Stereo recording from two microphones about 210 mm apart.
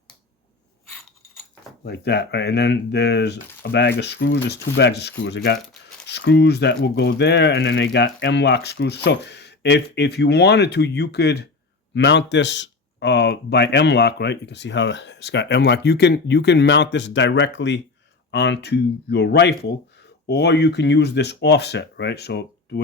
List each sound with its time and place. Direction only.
1.8 s speech: 55° left (ahead or behind)